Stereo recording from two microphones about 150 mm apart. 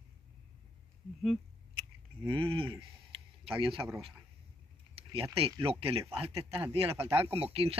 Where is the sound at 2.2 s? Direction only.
35° right (ahead or behind).